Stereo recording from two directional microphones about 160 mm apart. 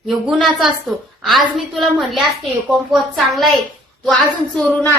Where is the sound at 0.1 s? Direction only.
Centre (ahead or behind).